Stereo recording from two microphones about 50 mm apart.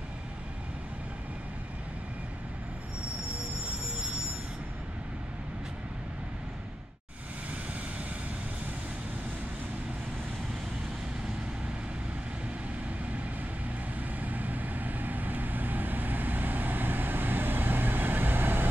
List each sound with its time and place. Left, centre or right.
13.9 s vehicle: right